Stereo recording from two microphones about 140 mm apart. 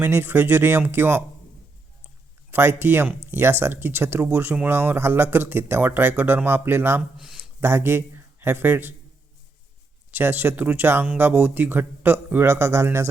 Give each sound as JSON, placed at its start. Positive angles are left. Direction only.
{"t": 0.0, "sound": "speech", "side_deg": -15}
{"t": 2.5, "sound": "speech", "side_deg": -15}
{"t": 10.1, "sound": "speech", "side_deg": -15}